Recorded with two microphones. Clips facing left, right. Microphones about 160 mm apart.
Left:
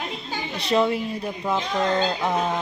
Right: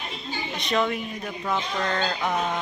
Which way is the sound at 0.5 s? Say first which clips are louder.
Left 4 dB; 30° left (ahead or behind).